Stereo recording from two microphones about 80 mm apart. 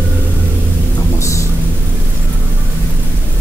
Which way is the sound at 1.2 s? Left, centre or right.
Left.